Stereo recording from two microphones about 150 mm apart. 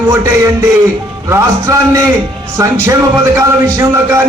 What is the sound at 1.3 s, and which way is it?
A man's voice, 20° right (ahead or behind).